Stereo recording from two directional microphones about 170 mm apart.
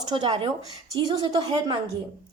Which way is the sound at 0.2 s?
30° right (ahead or behind).